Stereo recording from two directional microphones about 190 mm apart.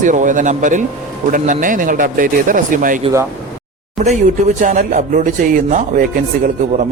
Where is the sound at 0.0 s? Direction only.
40° right (ahead or behind).